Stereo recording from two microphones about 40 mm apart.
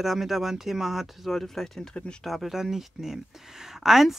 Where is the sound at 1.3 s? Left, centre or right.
Centre.